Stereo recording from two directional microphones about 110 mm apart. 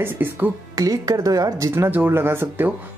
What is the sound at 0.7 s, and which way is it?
Speech, 35° right (ahead or behind).